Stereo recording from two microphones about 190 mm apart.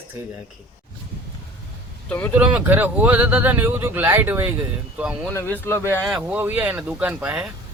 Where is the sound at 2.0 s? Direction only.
10° left (ahead or behind).